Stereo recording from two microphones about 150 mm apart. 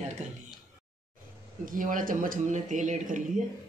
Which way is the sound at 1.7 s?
65° right (ahead or behind).